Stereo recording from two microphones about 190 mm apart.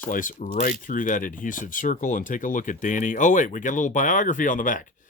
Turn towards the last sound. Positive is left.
turn(degrees=45)  # may be behind; listen again after turning